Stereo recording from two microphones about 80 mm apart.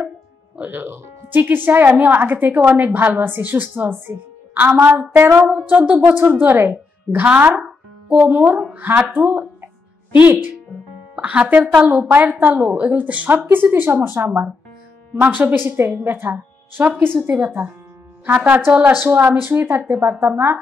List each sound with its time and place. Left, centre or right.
0.6 s a woman's voice: right
8.3 s speech: right
10.2 s speech: right